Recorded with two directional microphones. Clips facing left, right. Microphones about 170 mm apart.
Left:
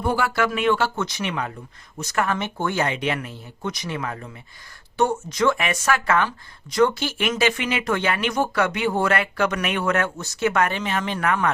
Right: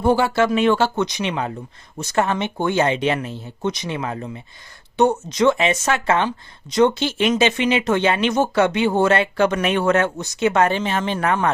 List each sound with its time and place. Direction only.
0.0 s speech: 25° right (ahead or behind)
0.9 s speech: 20° right (ahead or behind)